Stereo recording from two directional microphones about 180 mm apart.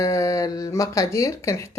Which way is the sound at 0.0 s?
15° left (ahead or behind).